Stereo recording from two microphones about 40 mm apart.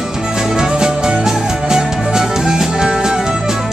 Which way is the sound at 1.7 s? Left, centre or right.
Centre.